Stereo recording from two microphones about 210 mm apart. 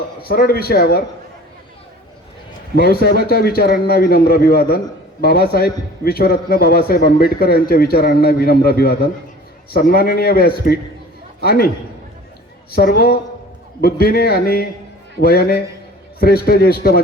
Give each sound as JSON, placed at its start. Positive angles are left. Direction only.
{"t": 0.2, "sound": "a man's voice", "side_deg": 45}
{"t": 2.7, "sound": "a man's voice", "side_deg": 50}
{"t": 12.7, "sound": "a man's voice", "side_deg": 45}